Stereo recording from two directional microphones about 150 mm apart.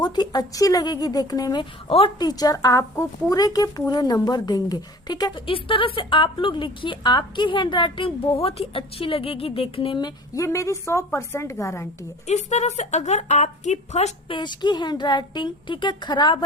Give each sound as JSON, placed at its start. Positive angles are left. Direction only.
{"t": 0.0, "sound": "speech", "side_deg": 25}
{"t": 1.9, "sound": "a woman's voice", "side_deg": 40}
{"t": 2.2, "sound": "a woman's voice", "side_deg": 25}
{"t": 10.3, "sound": "speech", "side_deg": 20}
{"t": 12.3, "sound": "a woman's voice", "side_deg": 50}
{"t": 14.3, "sound": "a woman's voice", "side_deg": 30}